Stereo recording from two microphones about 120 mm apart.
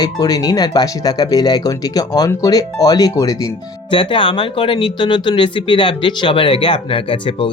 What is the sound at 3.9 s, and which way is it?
Speech, 45° left (ahead or behind).